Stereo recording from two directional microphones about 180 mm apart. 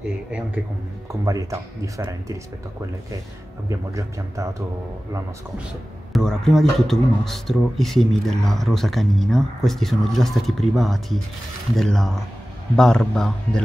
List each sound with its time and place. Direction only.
1.2 s speech: 20° right (ahead or behind)
3.6 s speech: 20° right (ahead or behind)
6.1 s speech: centre (ahead or behind)